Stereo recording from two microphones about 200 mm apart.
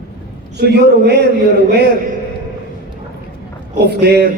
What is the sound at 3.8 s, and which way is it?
Speech, 55° right (ahead or behind).